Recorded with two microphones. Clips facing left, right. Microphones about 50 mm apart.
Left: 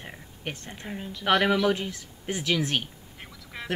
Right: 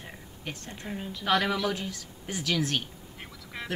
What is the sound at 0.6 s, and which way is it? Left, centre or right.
Speech, left.